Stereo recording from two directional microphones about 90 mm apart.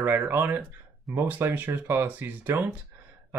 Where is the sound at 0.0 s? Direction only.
25° right (ahead or behind).